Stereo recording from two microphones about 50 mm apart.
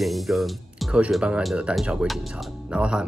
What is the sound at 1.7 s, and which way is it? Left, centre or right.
Speech, right.